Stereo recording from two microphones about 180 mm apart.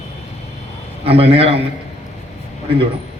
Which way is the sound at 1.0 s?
30° right (ahead or behind).